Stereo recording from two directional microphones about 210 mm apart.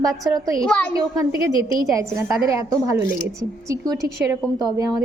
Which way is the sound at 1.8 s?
15° right (ahead or behind).